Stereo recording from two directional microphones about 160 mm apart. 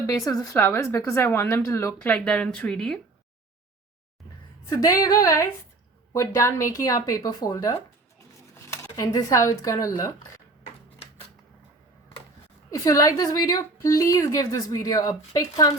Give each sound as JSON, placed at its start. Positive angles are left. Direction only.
{"t": 0.3, "sound": "a woman's voice", "side_deg": 20}
{"t": 4.7, "sound": "a woman's voice", "side_deg": 20}
{"t": 12.7, "sound": "a woman's voice", "side_deg": 20}